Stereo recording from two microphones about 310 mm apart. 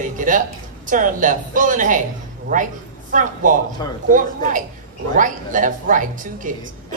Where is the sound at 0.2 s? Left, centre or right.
Right.